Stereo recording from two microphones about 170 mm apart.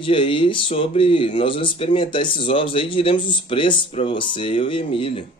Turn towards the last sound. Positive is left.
turn(degrees=30)  # may be behind; listen again after turning